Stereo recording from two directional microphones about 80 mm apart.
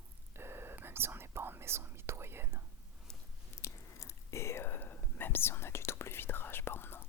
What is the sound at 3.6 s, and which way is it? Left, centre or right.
Whispering, left.